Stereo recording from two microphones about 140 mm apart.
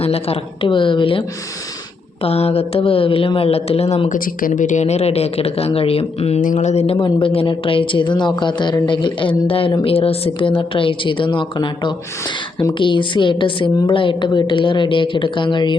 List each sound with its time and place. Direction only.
0.0 s a woman's voice: 45° left (ahead or behind)
2.2 s speech: 45° left (ahead or behind)
4.1 s speech: 80° left; by 6.4 s 45° left (ahead or behind)
6.4 s a woman's voice: 60° left (ahead or behind); by 15.7 s 35° left (ahead or behind)